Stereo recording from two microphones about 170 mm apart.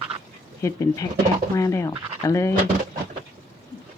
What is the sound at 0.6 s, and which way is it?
Speech, 15° left (ahead or behind).